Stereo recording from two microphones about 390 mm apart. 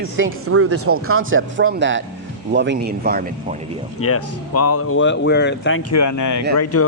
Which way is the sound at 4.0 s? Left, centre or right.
Left.